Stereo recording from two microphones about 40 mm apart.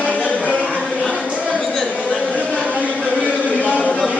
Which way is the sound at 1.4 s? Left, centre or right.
Centre.